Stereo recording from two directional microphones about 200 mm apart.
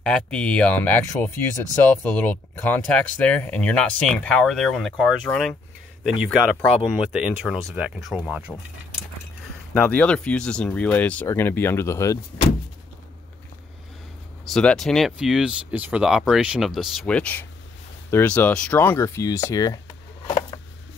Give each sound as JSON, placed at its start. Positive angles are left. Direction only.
{"t": 0.0, "sound": "speech", "side_deg": 5}
{"t": 9.8, "sound": "speech", "side_deg": 5}
{"t": 14.5, "sound": "speech", "side_deg": 5}
{"t": 20.2, "sound": "a sound", "side_deg": 15}